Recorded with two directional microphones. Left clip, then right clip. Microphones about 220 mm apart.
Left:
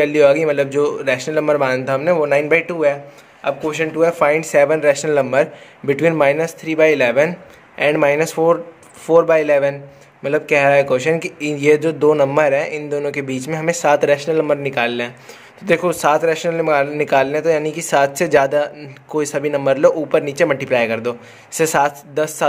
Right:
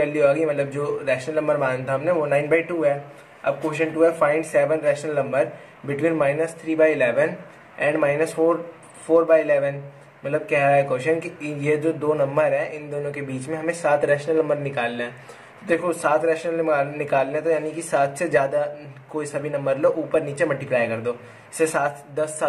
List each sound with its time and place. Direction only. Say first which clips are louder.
0.0 s speech: left 6 dB; 45° left (ahead or behind)